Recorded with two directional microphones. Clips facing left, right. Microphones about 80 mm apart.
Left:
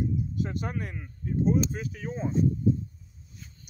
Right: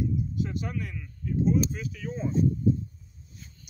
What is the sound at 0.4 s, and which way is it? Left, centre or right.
Speech, left.